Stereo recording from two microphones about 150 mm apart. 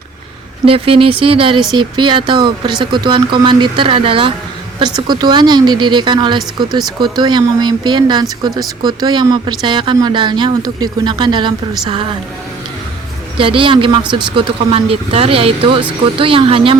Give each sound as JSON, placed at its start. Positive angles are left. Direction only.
{"t": 0.6, "sound": "speech", "side_deg": -40}
{"t": 13.3, "sound": "speech", "side_deg": -35}